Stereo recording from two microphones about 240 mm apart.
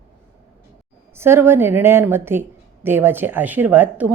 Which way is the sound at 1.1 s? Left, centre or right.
Centre.